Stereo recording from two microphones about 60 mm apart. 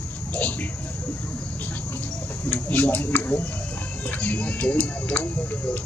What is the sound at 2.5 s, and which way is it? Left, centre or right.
Speech, left.